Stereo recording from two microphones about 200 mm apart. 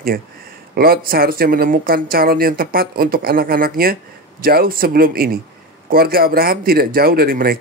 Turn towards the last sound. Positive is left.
turn(degrees=-50)  # may be behind; listen again after turning